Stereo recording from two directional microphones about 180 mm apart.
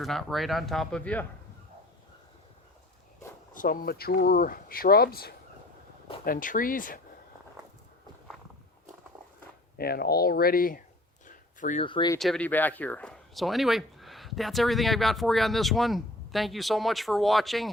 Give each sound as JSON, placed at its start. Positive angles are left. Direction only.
{"t": 0.0, "sound": "speech", "side_deg": 0}
{"t": 3.5, "sound": "speech", "side_deg": 50}
{"t": 9.7, "sound": "speech", "side_deg": 60}
{"t": 11.3, "sound": "a sound", "side_deg": 45}
{"t": 11.8, "sound": "speech", "side_deg": 25}
{"t": 12.2, "sound": "speech", "side_deg": 5}